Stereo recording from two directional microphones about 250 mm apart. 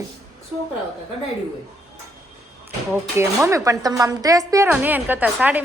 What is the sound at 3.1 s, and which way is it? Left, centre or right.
Speech, centre.